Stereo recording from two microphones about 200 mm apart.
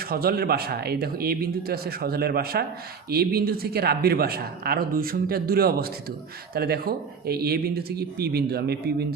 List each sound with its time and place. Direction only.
0.0 s speech: 50° right (ahead or behind)